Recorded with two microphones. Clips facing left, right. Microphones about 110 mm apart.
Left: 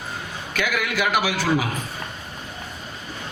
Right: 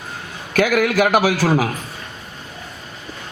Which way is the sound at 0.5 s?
45° right (ahead or behind).